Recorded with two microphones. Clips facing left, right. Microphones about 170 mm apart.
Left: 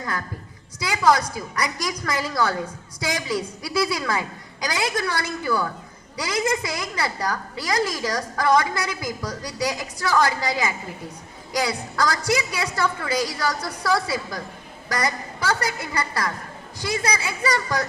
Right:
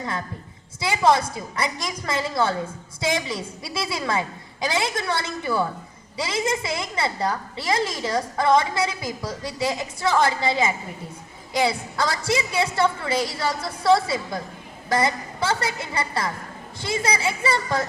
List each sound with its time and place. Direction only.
0.8 s a woman's voice: 25° right (ahead or behind)